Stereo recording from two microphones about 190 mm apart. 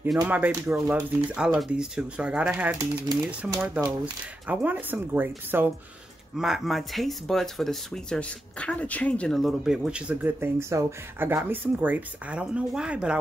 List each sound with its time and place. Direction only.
0.3 s speech: 5° right (ahead or behind)